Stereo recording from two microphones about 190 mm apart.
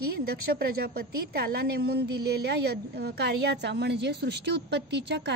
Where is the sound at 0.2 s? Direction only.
55° right (ahead or behind).